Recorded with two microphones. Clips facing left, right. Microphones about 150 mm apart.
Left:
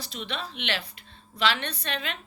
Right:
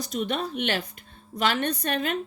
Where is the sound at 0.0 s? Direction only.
45° right (ahead or behind).